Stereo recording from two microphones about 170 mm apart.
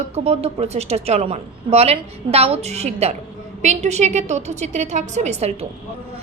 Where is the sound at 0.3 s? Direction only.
40° right (ahead or behind).